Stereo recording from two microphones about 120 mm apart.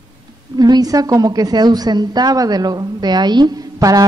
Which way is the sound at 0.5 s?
35° right (ahead or behind).